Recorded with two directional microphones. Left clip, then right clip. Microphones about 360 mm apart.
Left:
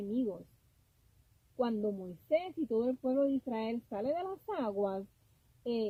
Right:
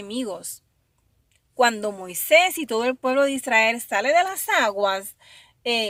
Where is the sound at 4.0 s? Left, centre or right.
Centre.